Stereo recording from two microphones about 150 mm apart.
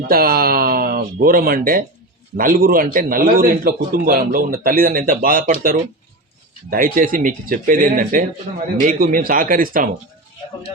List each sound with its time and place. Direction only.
0.1 s a man's voice: 80° right